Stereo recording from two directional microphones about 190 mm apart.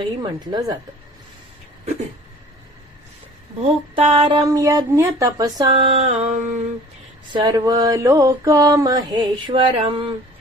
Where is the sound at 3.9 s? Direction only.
30° right (ahead or behind).